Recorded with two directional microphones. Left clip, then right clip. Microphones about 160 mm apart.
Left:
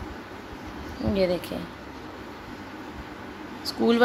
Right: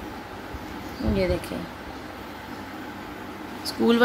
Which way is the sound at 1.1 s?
15° left (ahead or behind).